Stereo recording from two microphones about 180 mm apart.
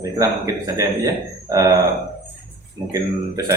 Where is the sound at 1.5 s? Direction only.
20° right (ahead or behind).